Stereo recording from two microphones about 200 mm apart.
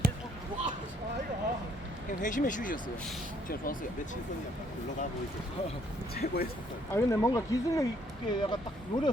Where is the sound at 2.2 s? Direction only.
40° left (ahead or behind).